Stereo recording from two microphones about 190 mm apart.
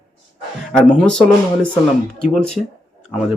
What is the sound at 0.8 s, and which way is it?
Speech, 5° left (ahead or behind).